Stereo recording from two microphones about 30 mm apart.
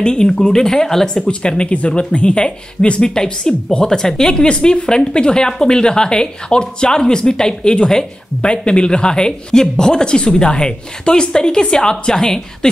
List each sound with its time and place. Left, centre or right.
0.0 s speech: left
1.0 s speech: left
1.7 s speech: left
2.0 s speech: left
3.2 s speech: centre
4.4 s speech: left